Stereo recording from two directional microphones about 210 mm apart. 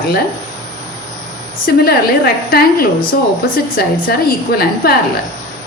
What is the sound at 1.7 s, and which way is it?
A woman's voice, 45° left (ahead or behind).